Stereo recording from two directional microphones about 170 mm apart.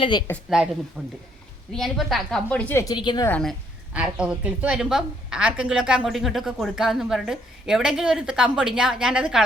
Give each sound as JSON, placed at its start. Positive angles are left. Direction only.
{"t": 0.0, "sound": "speech", "side_deg": 25}
{"t": 0.5, "sound": "a woman's voice", "side_deg": 0}
{"t": 2.9, "sound": "speech", "side_deg": 25}
{"t": 3.2, "sound": "a woman's voice", "side_deg": 10}
{"t": 3.9, "sound": "a woman's voice", "side_deg": -5}